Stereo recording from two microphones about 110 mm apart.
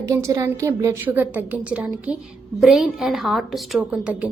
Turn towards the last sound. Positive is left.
turn(degrees=-10)  # may be behind; listen again after turning